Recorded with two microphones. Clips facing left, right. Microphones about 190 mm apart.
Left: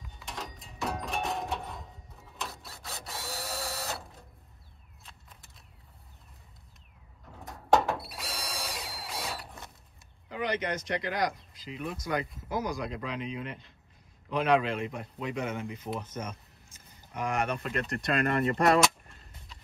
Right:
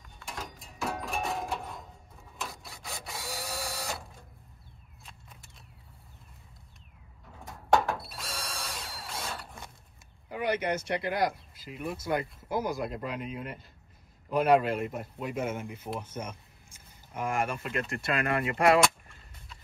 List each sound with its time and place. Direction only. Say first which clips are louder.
0.0 s a sound: even; centre (ahead or behind)
3.2 s drill: even; centre (ahead or behind)
7.3 s drill: left 1 dB; centre (ahead or behind)
10.3 s speech: right 2 dB; 10° right (ahead or behind)
17.8 s speech: left 3 dB; 40° left (ahead or behind)